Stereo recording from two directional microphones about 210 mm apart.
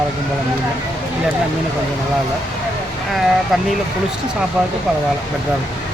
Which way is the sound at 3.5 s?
Centre (ahead or behind).